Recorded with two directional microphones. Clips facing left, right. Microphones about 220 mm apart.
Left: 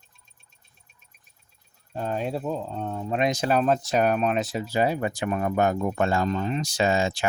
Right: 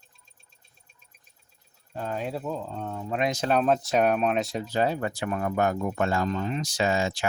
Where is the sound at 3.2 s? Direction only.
15° left (ahead or behind).